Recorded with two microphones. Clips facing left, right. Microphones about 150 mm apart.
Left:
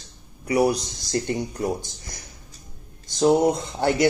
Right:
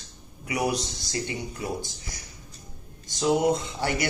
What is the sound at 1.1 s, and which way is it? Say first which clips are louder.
Speech: left 8 dB; 50° left (ahead or behind).